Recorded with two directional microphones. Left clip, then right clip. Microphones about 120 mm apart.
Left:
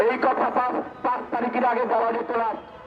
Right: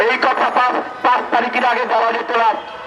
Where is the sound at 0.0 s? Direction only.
15° right (ahead or behind).